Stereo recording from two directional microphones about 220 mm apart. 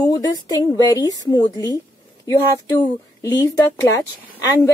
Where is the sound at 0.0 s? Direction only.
15° left (ahead or behind).